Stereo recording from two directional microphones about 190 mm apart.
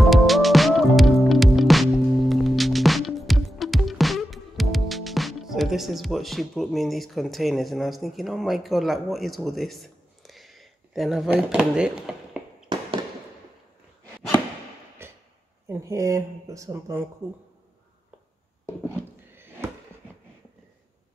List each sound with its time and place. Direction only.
0.1 s music: centre (ahead or behind)
12.7 s fireworks: 25° right (ahead or behind)
15.0 s hammer: 15° right (ahead or behind)
15.7 s speech: 15° right (ahead or behind)
18.9 s a sound: 15° right (ahead or behind)